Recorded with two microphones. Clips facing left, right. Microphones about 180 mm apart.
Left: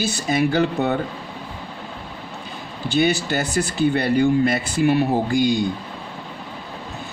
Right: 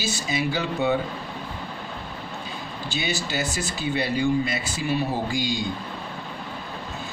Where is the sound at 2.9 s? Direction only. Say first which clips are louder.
Left 9 dB; 60° left (ahead or behind).